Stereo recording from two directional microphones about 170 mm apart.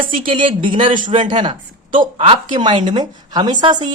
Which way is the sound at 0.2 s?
30° right (ahead or behind).